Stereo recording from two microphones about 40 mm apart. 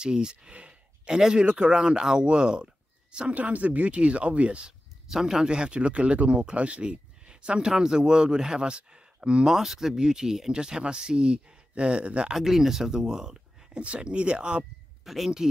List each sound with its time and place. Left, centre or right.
0.0 s speech: right
1.1 s speech: centre
3.3 s speech: right
5.0 s speech: centre
9.5 s speech: centre; by 12.3 s right
12.3 s speech: centre
13.7 s speech: right
15.0 s speech: centre